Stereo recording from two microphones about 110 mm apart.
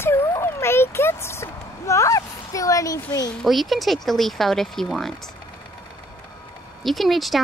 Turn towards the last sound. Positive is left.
turn(degrees=0)  # may be behind; listen again after turning